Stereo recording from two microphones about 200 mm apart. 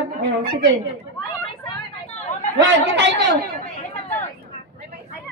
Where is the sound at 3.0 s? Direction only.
60° right (ahead or behind).